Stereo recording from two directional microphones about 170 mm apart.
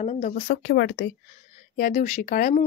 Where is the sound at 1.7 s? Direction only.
55° left (ahead or behind).